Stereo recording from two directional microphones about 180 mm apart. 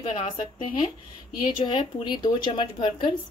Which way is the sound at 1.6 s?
25° left (ahead or behind).